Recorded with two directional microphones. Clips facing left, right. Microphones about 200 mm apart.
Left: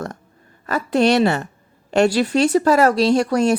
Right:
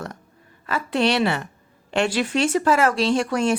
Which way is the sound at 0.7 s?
40° left (ahead or behind).